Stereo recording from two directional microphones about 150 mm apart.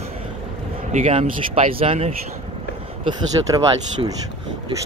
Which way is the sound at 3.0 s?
30° right (ahead or behind).